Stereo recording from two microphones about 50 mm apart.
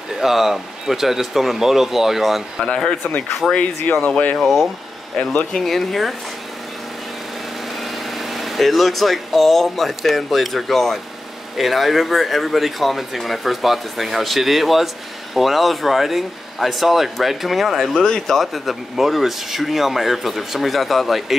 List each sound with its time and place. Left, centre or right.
0.2 s speech: centre
2.6 s speech: centre
3.5 s speech: left
4.4 s speech: centre
7.8 s speech: centre